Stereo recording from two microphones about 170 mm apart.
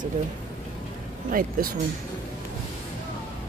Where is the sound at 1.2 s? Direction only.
55° right (ahead or behind).